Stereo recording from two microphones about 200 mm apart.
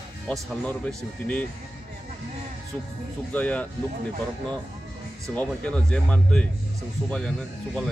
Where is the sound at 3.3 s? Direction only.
5° left (ahead or behind).